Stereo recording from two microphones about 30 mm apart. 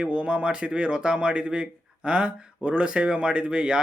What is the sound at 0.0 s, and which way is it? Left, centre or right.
Speech, right.